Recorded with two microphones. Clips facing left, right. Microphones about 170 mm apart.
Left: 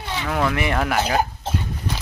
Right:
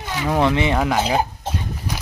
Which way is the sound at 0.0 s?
10° right (ahead or behind).